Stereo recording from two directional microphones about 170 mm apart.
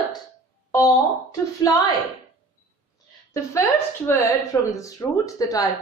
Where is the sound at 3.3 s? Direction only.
20° left (ahead or behind).